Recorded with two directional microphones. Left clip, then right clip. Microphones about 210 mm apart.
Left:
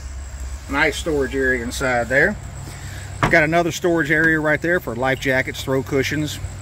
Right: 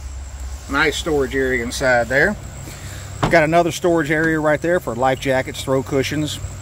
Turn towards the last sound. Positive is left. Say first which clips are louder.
# right 1 dB
turn(degrees=-5)  # may be behind; listen again after turning